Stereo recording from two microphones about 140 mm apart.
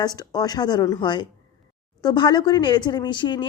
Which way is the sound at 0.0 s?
30° left (ahead or behind).